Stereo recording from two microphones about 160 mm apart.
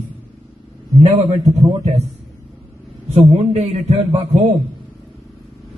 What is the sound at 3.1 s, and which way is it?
A man's voice, 40° right (ahead or behind).